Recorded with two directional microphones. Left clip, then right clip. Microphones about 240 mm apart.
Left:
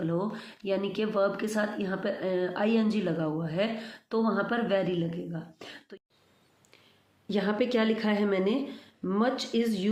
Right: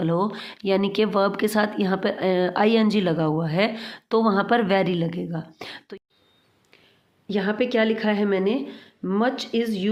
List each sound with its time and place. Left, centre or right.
0.0 s speech: right
7.3 s a woman's voice: centre